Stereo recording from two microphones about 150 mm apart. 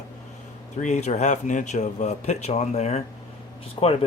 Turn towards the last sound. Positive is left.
turn(degrees=40)  # may be behind; listen again after turning